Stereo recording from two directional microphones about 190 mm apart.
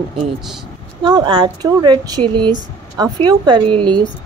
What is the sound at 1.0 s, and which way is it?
Speech, 25° right (ahead or behind).